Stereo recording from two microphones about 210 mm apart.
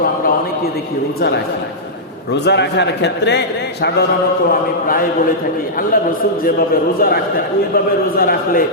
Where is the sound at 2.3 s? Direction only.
55° left (ahead or behind).